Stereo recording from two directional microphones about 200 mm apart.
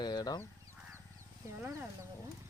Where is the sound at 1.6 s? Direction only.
15° right (ahead or behind).